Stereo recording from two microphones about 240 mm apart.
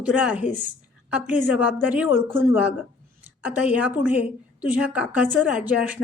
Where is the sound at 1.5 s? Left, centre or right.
Left.